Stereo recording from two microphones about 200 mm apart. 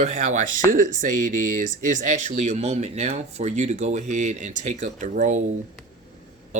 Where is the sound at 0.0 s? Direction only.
40° right (ahead or behind).